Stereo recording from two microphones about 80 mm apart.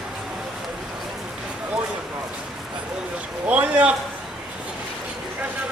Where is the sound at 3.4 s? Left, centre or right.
Centre.